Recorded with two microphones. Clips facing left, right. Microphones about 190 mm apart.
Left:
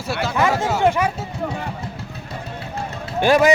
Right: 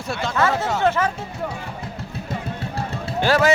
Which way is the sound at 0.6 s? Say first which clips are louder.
Left 2 dB; 15° left (ahead or behind).